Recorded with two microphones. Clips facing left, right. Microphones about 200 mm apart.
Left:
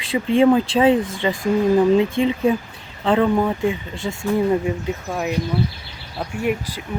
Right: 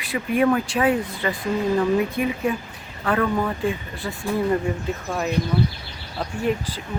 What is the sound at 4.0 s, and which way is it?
Speech, 85° left.